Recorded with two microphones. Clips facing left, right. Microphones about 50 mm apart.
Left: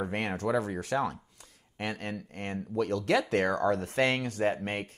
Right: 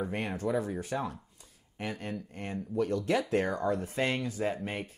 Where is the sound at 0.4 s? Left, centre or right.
Left.